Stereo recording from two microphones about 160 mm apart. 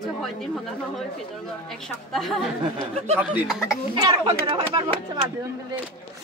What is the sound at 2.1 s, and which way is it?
Speech, centre (ahead or behind).